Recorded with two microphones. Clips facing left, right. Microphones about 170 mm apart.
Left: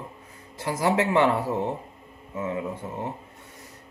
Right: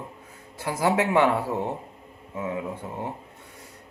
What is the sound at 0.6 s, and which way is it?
Speech, 10° right (ahead or behind).